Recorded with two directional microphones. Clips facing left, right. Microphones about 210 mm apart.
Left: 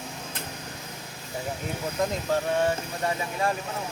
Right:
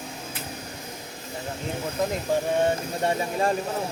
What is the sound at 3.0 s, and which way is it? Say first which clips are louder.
Speech: right 3 dB; 35° right (ahead or behind).